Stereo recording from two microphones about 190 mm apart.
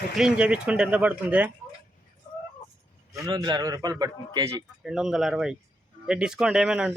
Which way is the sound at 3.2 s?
20° right (ahead or behind).